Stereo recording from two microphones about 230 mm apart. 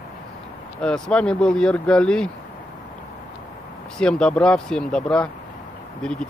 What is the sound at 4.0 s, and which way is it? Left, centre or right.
Speech, centre.